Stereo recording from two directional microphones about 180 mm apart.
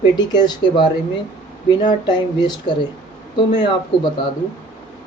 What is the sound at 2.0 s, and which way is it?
Speech, 25° left (ahead or behind).